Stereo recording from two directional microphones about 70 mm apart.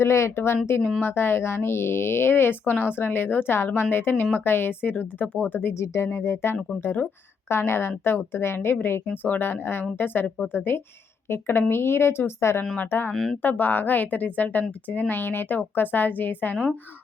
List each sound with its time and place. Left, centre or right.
0.0 s a woman's voice: left
5.8 s speech: left
10.2 s a woman's voice: centre
11.3 s speech: left
12.7 s a woman's voice: left